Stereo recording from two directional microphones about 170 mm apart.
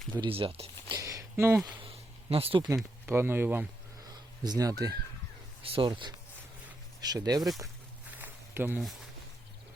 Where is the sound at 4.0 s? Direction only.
25° right (ahead or behind).